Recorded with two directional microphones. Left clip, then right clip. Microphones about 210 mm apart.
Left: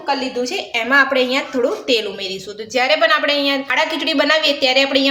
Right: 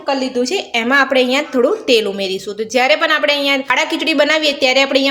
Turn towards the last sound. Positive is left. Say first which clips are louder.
# right 2 dB
turn(degrees=-40)  # may be behind; listen again after turning